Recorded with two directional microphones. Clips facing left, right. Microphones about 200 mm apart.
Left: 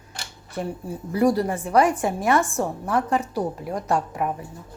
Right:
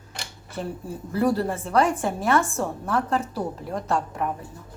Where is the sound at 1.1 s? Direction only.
15° left (ahead or behind).